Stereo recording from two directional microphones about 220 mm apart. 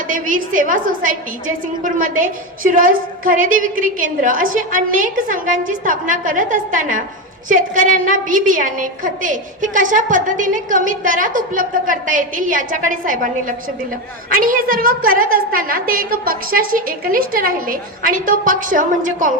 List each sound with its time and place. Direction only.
0.1 s a woman's voice: 35° right (ahead or behind)